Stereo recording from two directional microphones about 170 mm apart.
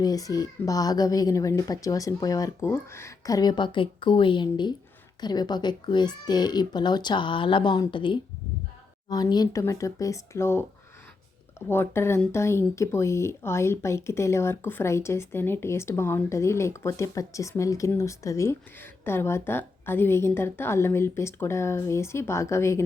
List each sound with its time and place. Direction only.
0.0 s speech: 20° left (ahead or behind)
11.7 s speech: 15° left (ahead or behind)